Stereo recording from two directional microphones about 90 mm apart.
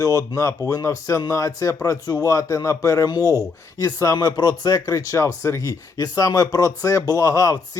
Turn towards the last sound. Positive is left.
turn(degrees=40)  # may be behind; listen again after turning